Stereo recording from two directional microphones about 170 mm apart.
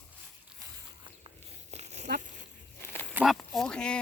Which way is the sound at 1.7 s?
40° right (ahead or behind).